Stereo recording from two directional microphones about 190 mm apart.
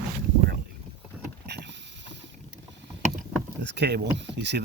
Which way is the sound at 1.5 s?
65° right (ahead or behind).